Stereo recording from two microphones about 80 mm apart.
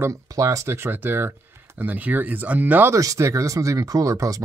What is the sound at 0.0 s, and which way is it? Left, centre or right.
Speech, right.